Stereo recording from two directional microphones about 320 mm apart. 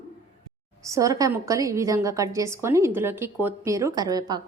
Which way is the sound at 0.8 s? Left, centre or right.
Centre.